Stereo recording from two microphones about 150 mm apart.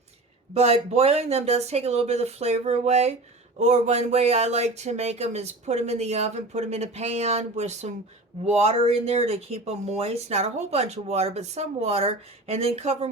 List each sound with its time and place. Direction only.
0.5 s speech: 45° right (ahead or behind)